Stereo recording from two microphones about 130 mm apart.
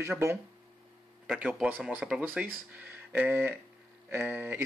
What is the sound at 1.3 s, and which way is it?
Speech, 5° right (ahead or behind).